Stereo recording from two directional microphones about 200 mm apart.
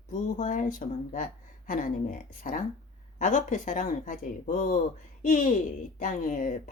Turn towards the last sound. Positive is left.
turn(degrees=40)  # may be behind; listen again after turning